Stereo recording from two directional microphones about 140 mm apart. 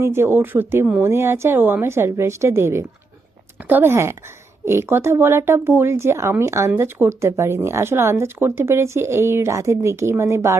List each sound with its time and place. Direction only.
0.0 s a woman's voice: 15° right (ahead or behind)